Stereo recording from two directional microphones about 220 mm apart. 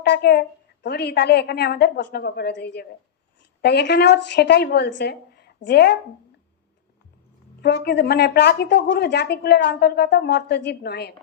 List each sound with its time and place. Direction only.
0.0 s a woman's voice: 50° left (ahead or behind)
7.6 s a woman's voice: 50° left (ahead or behind)